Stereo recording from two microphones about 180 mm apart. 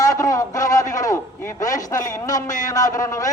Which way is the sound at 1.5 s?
20° left (ahead or behind).